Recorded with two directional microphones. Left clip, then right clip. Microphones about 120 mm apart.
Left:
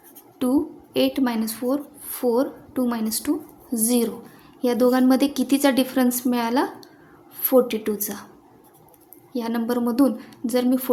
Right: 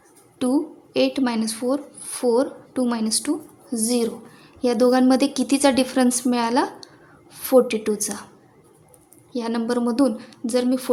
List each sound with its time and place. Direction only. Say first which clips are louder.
0.3 s speech: even; 20° right (ahead or behind)
3.8 s a woman's voice: even; centre (ahead or behind)
4.6 s a woman's voice: right 1 dB; 15° right (ahead or behind)
9.3 s a woman's voice: right 1 dB; 15° right (ahead or behind)